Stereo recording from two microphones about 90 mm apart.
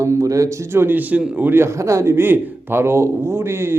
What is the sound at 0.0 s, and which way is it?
A man's voice, 35° right (ahead or behind).